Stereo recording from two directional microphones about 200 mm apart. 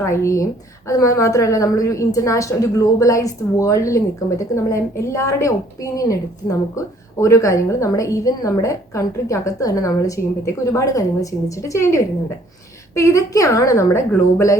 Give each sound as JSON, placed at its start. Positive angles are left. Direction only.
{"t": 0.0, "sound": "a woman's voice", "side_deg": 15}